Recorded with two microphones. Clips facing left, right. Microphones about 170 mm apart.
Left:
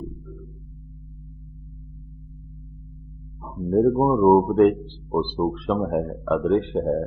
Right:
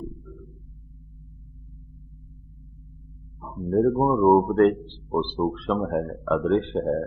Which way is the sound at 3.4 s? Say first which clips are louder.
Left 2 dB; 5° left (ahead or behind).